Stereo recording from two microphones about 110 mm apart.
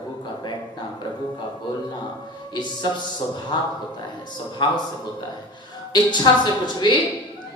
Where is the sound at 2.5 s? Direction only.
45° left (ahead or behind).